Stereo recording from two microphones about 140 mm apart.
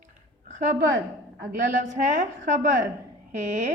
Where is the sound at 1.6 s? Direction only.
60° right (ahead or behind).